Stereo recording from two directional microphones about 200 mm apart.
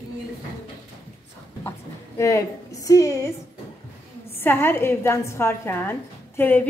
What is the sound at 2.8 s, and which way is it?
Speech, 15° left (ahead or behind).